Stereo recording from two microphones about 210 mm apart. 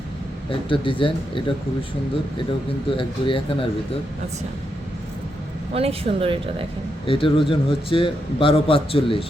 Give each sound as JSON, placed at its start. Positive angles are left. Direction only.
{"t": 0.7, "sound": "a man's voice", "side_deg": 25}
{"t": 2.9, "sound": "a man's voice", "side_deg": 25}
{"t": 5.7, "sound": "speech", "side_deg": -30}
{"t": 7.0, "sound": "a man's voice", "side_deg": 25}